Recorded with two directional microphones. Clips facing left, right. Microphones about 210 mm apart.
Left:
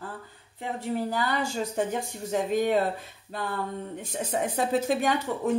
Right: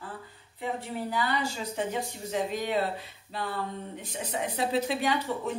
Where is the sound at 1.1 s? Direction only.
45° left (ahead or behind).